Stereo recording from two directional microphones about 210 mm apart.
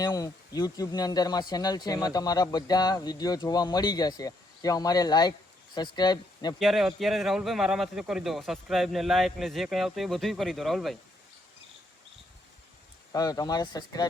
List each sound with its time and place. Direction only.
0.0 s speech: 20° left (ahead or behind)
6.6 s speech: centre (ahead or behind)
13.1 s speech: 20° left (ahead or behind)